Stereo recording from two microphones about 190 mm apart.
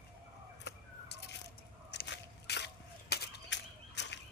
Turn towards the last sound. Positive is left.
turn(degrees=65)  # may be behind; listen again after turning